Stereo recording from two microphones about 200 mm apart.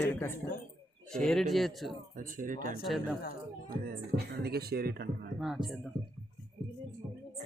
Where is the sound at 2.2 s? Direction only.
40° right (ahead or behind).